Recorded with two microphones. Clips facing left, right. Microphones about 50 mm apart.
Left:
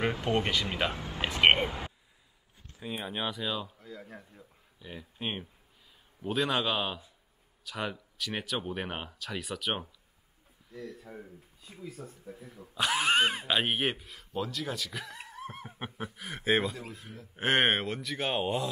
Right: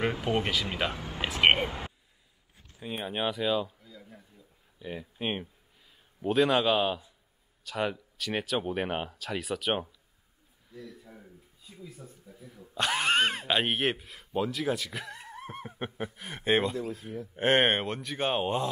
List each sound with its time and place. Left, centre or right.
0.0 s speech: centre
3.8 s a man's voice: left
4.7 s speech: centre
10.7 s speech: left
11.9 s speech: left
12.3 s a man's voice: left
12.7 s speech: centre
15.2 s a sound: centre
16.2 s speech: centre